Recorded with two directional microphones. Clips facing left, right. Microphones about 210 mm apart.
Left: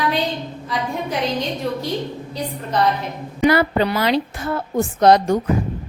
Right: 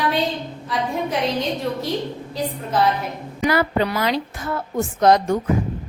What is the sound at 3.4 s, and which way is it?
A woman's voice, 30° left (ahead or behind).